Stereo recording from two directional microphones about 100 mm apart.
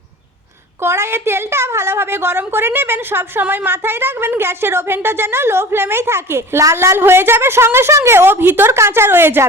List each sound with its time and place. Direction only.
0.8 s a woman's voice: 25° right (ahead or behind)